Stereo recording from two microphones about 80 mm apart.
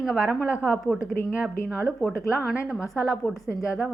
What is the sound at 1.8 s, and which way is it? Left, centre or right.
Speech, left.